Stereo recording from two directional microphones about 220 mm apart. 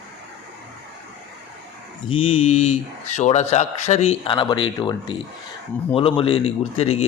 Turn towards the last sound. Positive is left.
turn(degrees=25)  # may be behind; listen again after turning